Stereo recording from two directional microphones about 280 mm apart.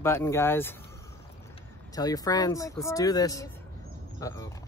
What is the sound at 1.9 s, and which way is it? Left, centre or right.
Speech, centre.